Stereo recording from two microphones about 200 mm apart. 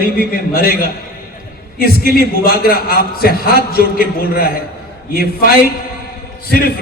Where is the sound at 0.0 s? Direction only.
50° left (ahead or behind).